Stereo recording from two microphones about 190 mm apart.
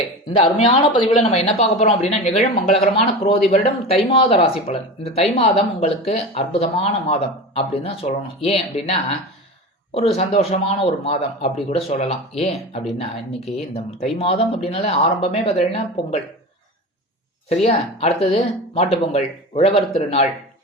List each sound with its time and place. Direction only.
0.3 s speech: 25° left (ahead or behind)
14.2 s speech: 30° left (ahead or behind)
17.5 s speech: 35° left (ahead or behind)